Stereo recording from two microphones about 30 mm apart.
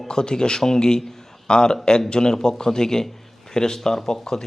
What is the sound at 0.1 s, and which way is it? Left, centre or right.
A man's voice, left.